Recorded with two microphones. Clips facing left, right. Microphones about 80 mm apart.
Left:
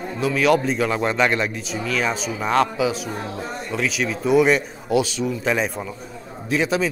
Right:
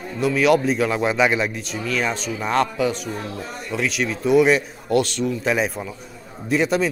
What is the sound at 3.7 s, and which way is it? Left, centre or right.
A man's voice, centre.